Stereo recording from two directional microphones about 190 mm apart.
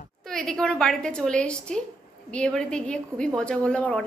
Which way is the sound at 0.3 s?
5° left (ahead or behind).